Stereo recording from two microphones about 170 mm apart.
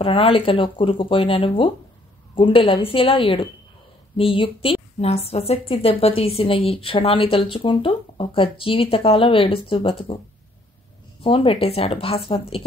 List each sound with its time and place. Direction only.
0.0 s a woman's voice: 30° left (ahead or behind)
11.2 s a woman's voice: 35° left (ahead or behind)